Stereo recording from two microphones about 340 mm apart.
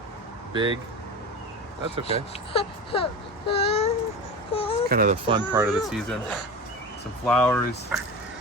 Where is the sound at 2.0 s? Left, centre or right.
Centre.